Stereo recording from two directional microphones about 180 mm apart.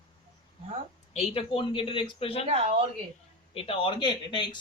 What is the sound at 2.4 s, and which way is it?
Speech, 35° right (ahead or behind).